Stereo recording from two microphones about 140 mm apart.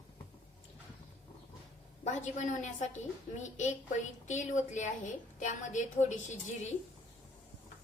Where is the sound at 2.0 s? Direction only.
55° left (ahead or behind).